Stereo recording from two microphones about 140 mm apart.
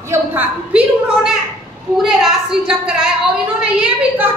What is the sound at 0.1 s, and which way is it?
A woman's voice, 15° right (ahead or behind).